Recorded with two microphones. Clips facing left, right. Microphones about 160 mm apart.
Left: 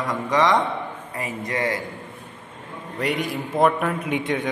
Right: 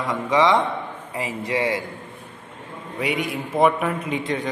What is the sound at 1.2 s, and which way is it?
Speech, 25° right (ahead or behind).